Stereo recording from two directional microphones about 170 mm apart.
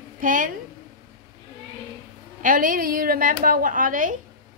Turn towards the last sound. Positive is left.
turn(degrees=-50)  # may be behind; listen again after turning